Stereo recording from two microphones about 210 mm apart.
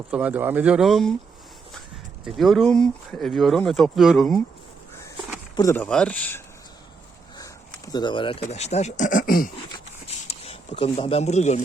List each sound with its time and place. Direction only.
0.1 s speech: 5° right (ahead or behind)
2.2 s speech: centre (ahead or behind)
5.5 s speech: 10° left (ahead or behind)
7.9 s speech: 20° left (ahead or behind); by 9.5 s 40° left (ahead or behind)
10.2 s speech: 30° left (ahead or behind)